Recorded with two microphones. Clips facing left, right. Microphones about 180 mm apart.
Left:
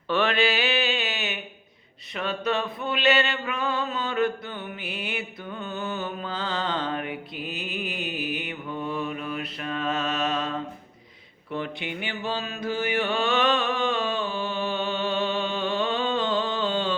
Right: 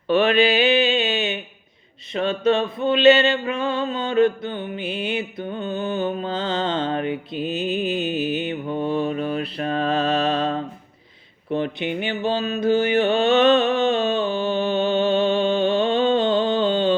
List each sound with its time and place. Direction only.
0.1 s mantra: 15° right (ahead or behind)
2.1 s a sound: 25° right (ahead or behind)
11.5 s mantra: 25° right (ahead or behind)